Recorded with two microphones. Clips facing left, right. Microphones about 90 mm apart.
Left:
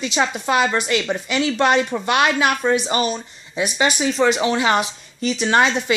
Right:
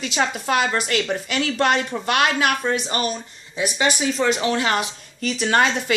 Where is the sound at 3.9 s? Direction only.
25° left (ahead or behind).